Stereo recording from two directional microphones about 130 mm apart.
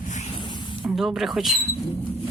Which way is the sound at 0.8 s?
Centre (ahead or behind).